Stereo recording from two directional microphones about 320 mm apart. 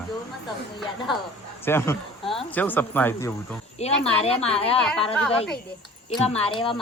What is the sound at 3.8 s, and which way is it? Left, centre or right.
Speech, centre.